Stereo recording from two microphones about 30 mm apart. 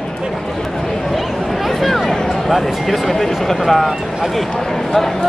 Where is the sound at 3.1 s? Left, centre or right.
Centre.